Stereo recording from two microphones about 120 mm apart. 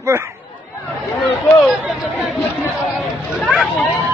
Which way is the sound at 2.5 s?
10° right (ahead or behind).